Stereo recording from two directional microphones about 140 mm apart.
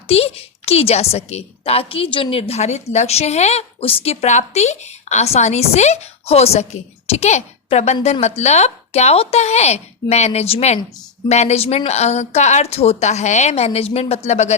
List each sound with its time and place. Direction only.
0.1 s a woman's voice: 45° left (ahead or behind)